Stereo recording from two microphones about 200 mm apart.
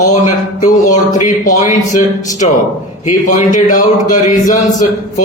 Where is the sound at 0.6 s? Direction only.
40° left (ahead or behind).